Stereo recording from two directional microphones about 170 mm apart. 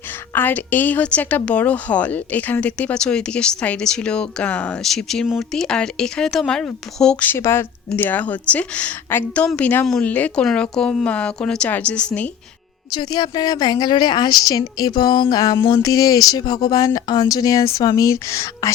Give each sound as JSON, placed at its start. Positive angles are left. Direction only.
{"t": 0.1, "sound": "a woman's voice", "side_deg": 10}
{"t": 12.9, "sound": "a woman's voice", "side_deg": 25}